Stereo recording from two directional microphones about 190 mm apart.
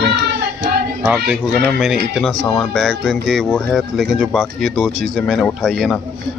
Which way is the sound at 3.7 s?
5° right (ahead or behind).